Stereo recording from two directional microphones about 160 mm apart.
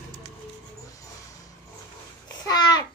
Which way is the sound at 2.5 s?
25° left (ahead or behind).